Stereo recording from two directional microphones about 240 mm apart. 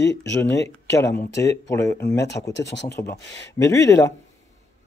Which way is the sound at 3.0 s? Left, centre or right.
Centre.